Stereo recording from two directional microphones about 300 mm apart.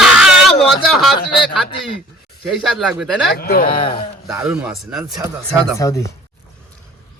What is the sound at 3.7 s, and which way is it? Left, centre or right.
Speech, centre.